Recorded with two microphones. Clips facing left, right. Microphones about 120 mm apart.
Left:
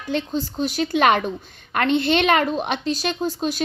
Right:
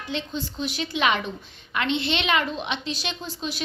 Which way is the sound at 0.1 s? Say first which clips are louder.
Left 7 dB; 45° left (ahead or behind).